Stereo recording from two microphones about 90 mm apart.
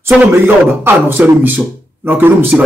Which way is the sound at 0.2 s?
20° right (ahead or behind).